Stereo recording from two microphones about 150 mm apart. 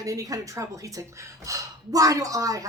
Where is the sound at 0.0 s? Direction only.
25° right (ahead or behind).